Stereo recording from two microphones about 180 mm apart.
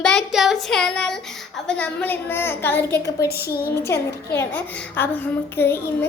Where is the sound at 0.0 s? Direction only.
Centre (ahead or behind).